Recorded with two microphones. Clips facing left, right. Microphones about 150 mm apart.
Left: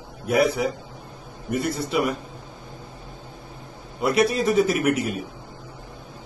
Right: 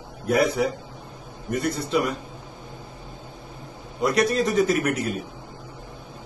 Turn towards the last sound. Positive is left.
turn(degrees=5)  # may be behind; listen again after turning